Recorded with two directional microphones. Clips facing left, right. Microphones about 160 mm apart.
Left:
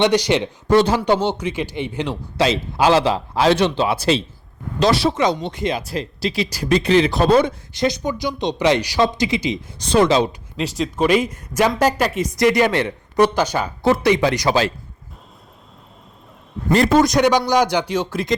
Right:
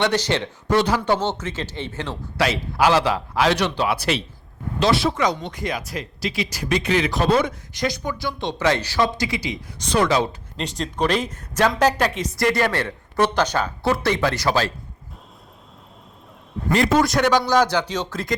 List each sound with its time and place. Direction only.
0.0 s speech: 15° left (ahead or behind)
0.7 s speech: 30° left (ahead or behind)
4.8 s speech: 35° left (ahead or behind)
5.1 s speech: 25° left (ahead or behind)
10.6 s speech: 5° left (ahead or behind)
16.7 s speech: 40° left (ahead or behind)
17.0 s speech: 15° left (ahead or behind)